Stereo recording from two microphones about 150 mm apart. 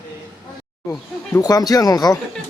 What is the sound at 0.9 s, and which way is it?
Speech, 20° left (ahead or behind).